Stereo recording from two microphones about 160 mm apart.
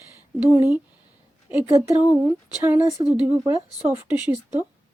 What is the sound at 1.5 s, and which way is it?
A woman's voice, 10° right (ahead or behind).